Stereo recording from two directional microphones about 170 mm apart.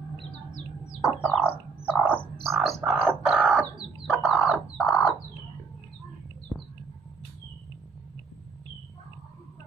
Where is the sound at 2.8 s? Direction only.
15° right (ahead or behind).